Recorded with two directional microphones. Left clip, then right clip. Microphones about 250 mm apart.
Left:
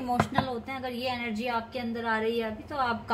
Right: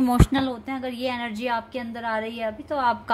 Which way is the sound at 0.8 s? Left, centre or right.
Right.